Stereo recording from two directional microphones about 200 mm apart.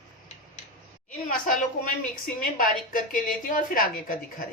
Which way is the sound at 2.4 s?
40° left (ahead or behind).